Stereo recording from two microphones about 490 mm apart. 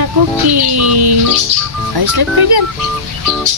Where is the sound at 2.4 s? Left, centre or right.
Right.